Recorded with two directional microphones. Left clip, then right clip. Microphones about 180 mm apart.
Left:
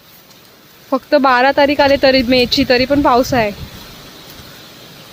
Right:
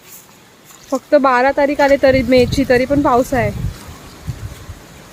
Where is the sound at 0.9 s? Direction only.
5° left (ahead or behind).